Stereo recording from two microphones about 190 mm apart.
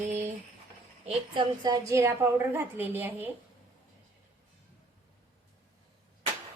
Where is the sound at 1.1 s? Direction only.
25° right (ahead or behind).